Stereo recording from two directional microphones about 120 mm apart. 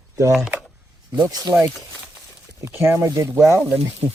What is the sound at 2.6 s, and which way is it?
Speech, 20° right (ahead or behind).